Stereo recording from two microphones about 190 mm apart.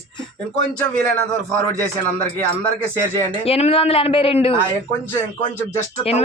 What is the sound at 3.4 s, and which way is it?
Speech, 30° left (ahead or behind).